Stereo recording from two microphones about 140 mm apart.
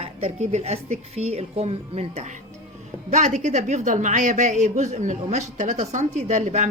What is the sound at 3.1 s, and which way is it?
A woman's voice, 60° right (ahead or behind).